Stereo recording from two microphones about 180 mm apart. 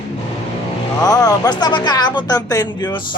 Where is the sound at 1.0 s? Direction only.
20° left (ahead or behind).